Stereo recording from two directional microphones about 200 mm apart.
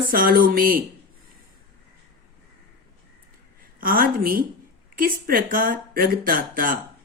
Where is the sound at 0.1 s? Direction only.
45° right (ahead or behind).